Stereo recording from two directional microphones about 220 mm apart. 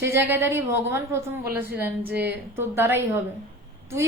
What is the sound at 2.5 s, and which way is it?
Speech, 10° right (ahead or behind).